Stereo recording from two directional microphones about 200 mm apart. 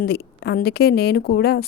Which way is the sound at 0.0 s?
55° left (ahead or behind).